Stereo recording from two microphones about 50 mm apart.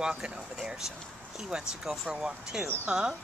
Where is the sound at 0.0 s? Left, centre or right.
Centre.